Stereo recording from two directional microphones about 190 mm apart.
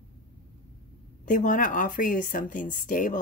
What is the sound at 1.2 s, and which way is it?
Speech, 45° left (ahead or behind).